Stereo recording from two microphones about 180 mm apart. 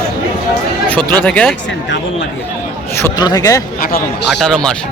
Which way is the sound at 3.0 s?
20° left (ahead or behind).